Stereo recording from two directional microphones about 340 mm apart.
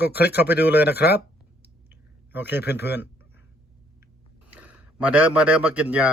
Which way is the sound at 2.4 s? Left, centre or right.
Left.